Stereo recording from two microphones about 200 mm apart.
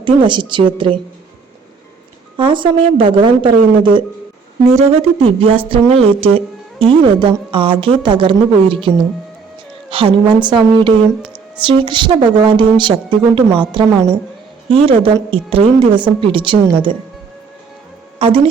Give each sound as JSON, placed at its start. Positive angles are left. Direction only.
{"t": 0.0, "sound": "speech", "side_deg": -25}
{"t": 2.3, "sound": "speech", "side_deg": -25}